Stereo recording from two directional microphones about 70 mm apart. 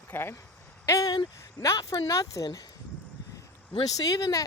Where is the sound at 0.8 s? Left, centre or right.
Left.